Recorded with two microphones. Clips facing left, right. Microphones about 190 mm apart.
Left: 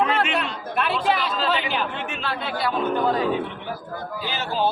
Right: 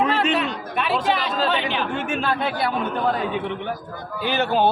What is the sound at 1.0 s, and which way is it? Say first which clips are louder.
Chatter: even; centre (ahead or behind).